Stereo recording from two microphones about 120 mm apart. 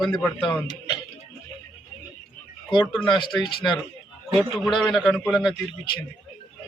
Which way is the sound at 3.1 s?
40° left (ahead or behind).